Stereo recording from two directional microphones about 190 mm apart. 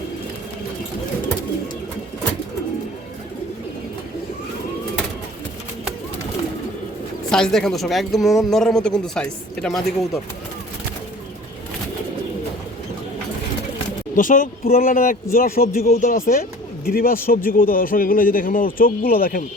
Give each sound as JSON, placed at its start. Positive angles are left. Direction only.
{"t": 7.3, "sound": "speech", "side_deg": 5}
{"t": 14.2, "sound": "speech", "side_deg": 45}